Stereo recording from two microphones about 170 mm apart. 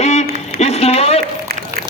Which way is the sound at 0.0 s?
40° left (ahead or behind).